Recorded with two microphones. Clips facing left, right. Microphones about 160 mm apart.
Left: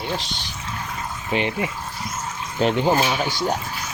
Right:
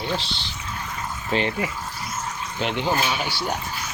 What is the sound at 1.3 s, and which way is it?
Speech, 15° left (ahead or behind).